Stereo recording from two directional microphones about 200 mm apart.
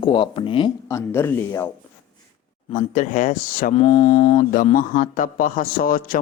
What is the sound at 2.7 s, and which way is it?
A man's voice, 40° left (ahead or behind).